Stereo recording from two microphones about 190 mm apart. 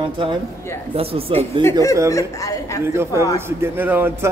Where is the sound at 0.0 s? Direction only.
25° right (ahead or behind).